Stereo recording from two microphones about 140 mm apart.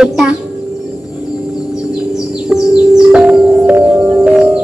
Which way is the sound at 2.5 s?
25° left (ahead or behind).